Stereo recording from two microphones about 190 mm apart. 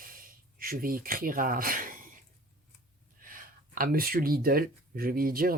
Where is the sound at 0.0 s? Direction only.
50° right (ahead or behind).